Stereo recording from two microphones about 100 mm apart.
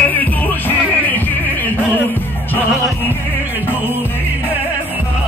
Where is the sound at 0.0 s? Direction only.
15° left (ahead or behind).